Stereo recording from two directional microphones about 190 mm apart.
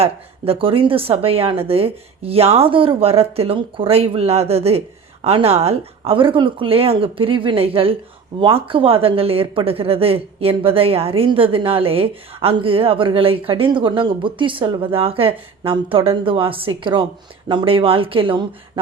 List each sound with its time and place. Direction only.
0.0 s a woman's voice: 30° right (ahead or behind)